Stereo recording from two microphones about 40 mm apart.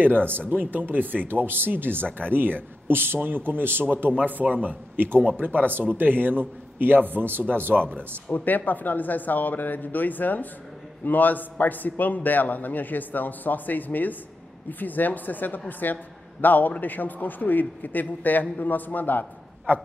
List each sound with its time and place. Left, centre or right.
0.0 s speech: right
4.2 s speech: right
8.3 s a man's voice: left
19.7 s speech: right